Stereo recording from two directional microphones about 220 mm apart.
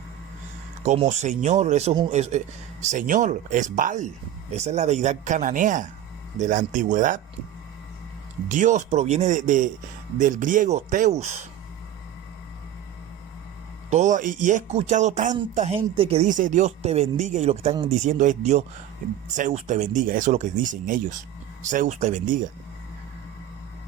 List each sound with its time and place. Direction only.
0.8 s speech: 30° right (ahead or behind)
8.4 s speech: 35° right (ahead or behind)
13.9 s speech: 35° right (ahead or behind)